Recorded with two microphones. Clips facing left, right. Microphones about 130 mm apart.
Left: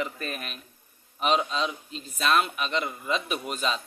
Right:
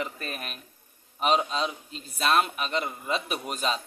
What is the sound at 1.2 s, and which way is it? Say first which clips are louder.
A man's voice: even; 40° right (ahead or behind).